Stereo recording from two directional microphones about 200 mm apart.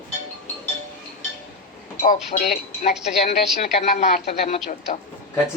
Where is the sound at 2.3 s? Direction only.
40° left (ahead or behind).